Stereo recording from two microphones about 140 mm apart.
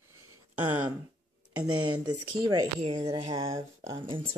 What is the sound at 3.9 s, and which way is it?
Speech, 40° right (ahead or behind).